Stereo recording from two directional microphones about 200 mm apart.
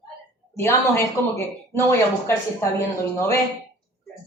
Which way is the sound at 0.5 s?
15° left (ahead or behind).